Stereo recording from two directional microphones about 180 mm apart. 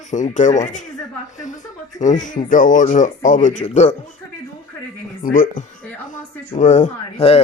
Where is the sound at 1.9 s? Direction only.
45° left (ahead or behind).